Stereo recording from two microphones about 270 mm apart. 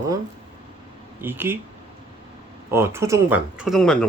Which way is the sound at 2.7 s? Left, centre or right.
Centre.